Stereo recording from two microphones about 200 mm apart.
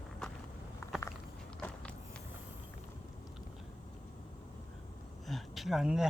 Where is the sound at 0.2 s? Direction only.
Centre (ahead or behind).